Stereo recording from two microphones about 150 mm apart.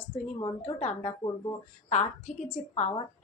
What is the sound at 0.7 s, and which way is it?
Speech, 45° left (ahead or behind).